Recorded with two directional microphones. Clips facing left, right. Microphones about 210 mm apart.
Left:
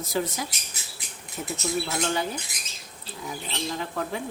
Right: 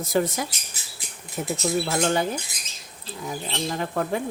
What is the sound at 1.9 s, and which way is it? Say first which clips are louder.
Speech: right 5 dB; 50° right (ahead or behind).